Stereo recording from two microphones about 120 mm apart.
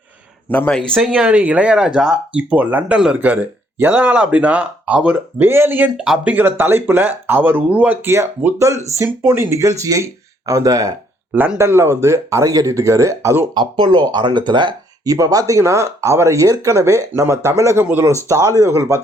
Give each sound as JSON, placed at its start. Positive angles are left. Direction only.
{"t": 0.7, "sound": "speech", "side_deg": 5}
{"t": 1.0, "sound": "speech", "side_deg": -10}
{"t": 8.7, "sound": "speech", "side_deg": 25}
{"t": 9.0, "sound": "speech", "side_deg": -20}
{"t": 11.3, "sound": "speech", "side_deg": -15}
{"t": 13.5, "sound": "speech", "side_deg": -40}